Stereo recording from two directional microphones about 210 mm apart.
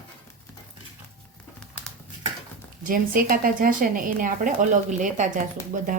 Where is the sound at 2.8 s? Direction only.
40° right (ahead or behind).